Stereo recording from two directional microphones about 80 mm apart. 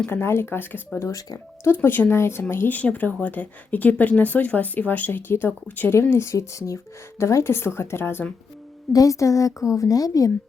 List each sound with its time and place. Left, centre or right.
0.1 s speech: left
0.9 s a woman's voice: left
1.6 s speech: left
8.9 s a woman's voice: left